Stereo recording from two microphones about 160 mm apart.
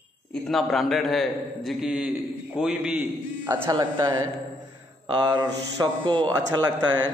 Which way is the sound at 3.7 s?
25° right (ahead or behind).